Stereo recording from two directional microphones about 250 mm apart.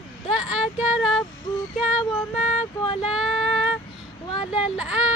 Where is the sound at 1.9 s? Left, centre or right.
Left.